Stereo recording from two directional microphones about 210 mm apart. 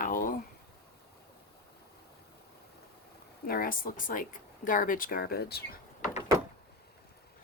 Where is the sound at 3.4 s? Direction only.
45° left (ahead or behind).